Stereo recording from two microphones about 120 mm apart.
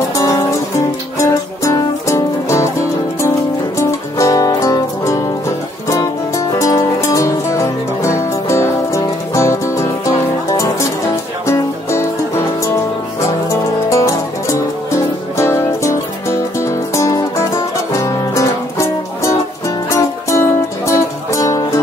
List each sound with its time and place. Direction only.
0.1 s music: 25° left (ahead or behind)
13.5 s music: 25° left (ahead or behind)